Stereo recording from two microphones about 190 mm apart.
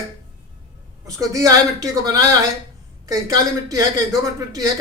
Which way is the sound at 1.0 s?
15° right (ahead or behind).